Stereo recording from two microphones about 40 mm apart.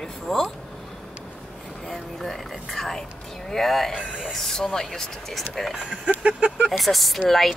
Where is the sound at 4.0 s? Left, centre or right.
Right.